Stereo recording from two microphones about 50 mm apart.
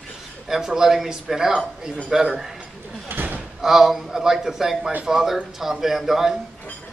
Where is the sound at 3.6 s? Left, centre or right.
Centre.